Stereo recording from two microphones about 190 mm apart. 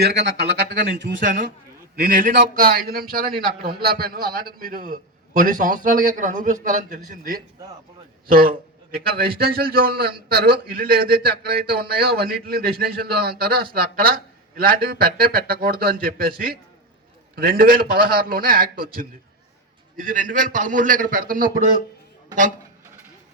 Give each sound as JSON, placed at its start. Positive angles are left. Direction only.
{"t": 0.0, "sound": "speech", "side_deg": -60}
{"t": 2.0, "sound": "a man's voice", "side_deg": -45}